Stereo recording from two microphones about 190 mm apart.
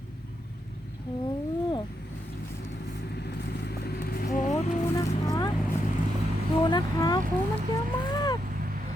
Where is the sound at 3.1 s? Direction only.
60° left (ahead or behind).